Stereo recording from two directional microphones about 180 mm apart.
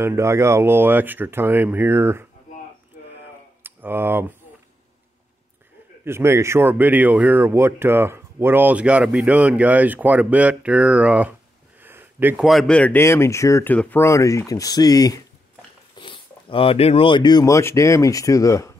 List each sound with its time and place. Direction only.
0.0 s speech: 15° right (ahead or behind)
3.6 s speech: 10° right (ahead or behind)
6.0 s speech: 15° right (ahead or behind)
11.8 s a sound: 10° right (ahead or behind)
12.4 s speech: 5° left (ahead or behind)